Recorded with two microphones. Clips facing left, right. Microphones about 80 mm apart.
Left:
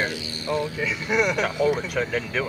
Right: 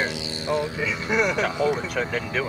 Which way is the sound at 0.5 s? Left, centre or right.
Right.